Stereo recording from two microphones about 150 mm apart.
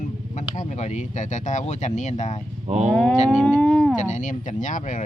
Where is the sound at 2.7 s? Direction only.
45° right (ahead or behind).